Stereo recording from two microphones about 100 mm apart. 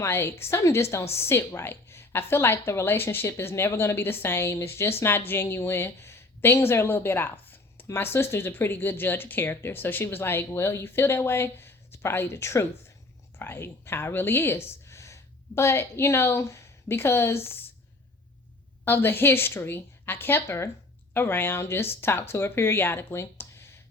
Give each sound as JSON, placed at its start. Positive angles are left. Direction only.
{"t": 0.0, "sound": "speech", "side_deg": 25}
{"t": 18.9, "sound": "speech", "side_deg": 20}